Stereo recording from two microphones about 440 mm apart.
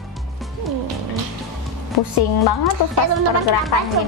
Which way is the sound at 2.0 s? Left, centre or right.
Left.